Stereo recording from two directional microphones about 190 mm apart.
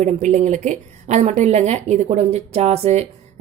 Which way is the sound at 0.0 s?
40° right (ahead or behind).